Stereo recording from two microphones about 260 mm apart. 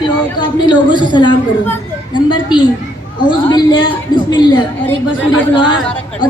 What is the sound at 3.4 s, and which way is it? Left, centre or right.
A woman's voice, centre.